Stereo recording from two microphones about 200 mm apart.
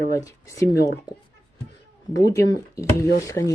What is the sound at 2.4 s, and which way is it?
Speech, 15° left (ahead or behind).